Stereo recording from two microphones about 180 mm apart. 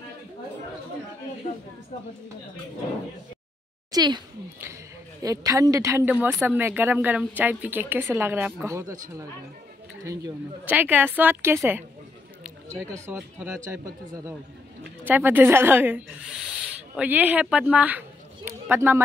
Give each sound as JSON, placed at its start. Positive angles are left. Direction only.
{"t": 3.9, "sound": "a child's voice", "side_deg": -25}
{"t": 5.2, "sound": "speech", "side_deg": -20}
{"t": 10.0, "sound": "a woman's voice", "side_deg": -15}